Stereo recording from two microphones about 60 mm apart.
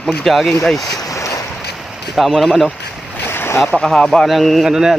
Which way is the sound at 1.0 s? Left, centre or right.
Left.